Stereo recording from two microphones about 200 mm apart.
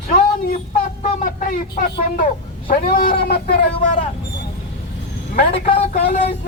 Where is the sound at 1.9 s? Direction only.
45° left (ahead or behind).